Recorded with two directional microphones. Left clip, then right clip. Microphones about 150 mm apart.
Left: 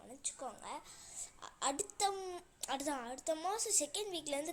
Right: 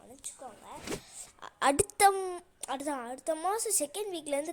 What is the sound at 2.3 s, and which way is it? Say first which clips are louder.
Speech: right 4 dB; 30° right (ahead or behind).